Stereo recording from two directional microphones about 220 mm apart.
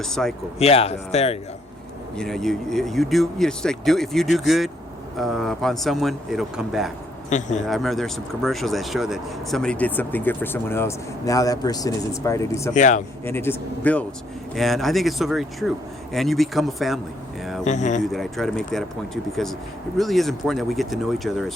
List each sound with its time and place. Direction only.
0.0 s speech: centre (ahead or behind)
0.6 s speech: 25° left (ahead or behind)
2.1 s speech: centre (ahead or behind)
7.3 s speech: 35° left (ahead or behind)
7.6 s speech: centre (ahead or behind)
12.7 s speech: 35° left (ahead or behind)
13.2 s speech: 10° left (ahead or behind)
17.6 s speech: 35° left (ahead or behind)
18.0 s speech: centre (ahead or behind)